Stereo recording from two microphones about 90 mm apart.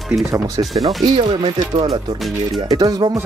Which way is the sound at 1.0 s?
60° right (ahead or behind).